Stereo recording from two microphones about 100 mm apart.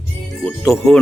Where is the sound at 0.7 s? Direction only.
30° left (ahead or behind).